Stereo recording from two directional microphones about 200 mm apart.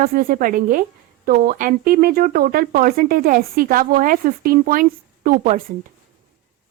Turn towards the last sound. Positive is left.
turn(degrees=-40)  # may be behind; listen again after turning